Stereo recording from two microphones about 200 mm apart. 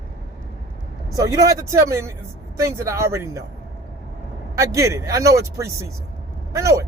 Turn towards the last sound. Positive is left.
turn(degrees=-15)  # may be behind; listen again after turning